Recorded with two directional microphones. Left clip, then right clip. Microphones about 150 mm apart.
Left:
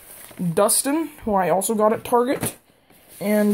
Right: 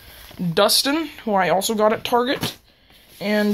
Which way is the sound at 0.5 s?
15° left (ahead or behind).